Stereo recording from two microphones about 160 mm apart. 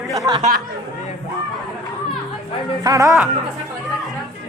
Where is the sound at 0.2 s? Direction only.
25° right (ahead or behind).